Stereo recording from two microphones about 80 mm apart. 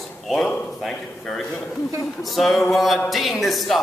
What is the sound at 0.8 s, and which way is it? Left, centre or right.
A man's voice, centre.